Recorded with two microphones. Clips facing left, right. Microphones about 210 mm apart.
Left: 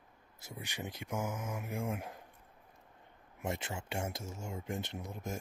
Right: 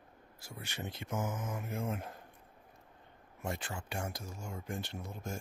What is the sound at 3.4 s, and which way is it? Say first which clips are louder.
Speech: left 1 dB; 20° left (ahead or behind).